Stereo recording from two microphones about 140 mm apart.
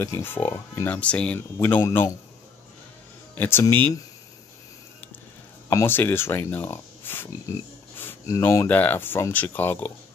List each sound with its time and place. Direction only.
0.0 s speech: 20° left (ahead or behind)
3.3 s speech: 15° left (ahead or behind)
5.7 s speech: 20° left (ahead or behind)